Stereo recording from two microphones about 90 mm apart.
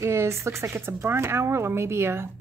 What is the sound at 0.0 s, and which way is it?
A woman's voice, 30° right (ahead or behind).